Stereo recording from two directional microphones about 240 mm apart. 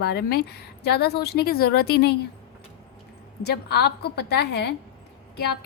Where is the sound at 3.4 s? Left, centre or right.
Left.